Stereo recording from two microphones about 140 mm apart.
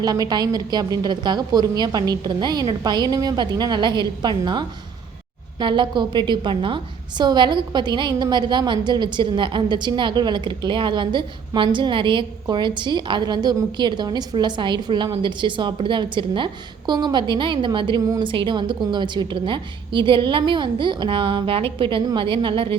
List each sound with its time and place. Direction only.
0.0 s a woman's voice: 30° right (ahead or behind)